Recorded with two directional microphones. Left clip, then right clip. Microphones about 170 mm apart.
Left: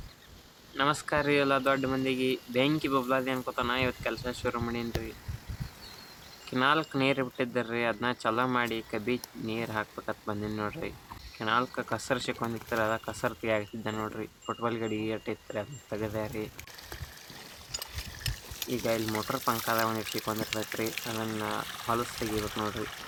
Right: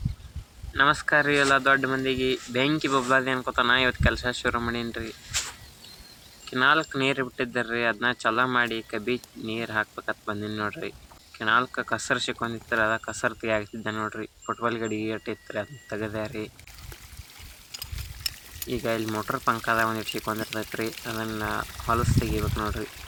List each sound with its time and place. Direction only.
0.8 s speech: 15° right (ahead or behind)
6.4 s speech: 5° right (ahead or behind)
18.7 s speech: 20° right (ahead or behind)